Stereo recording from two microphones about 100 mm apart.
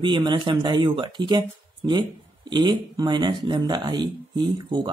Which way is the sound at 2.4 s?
50° right (ahead or behind).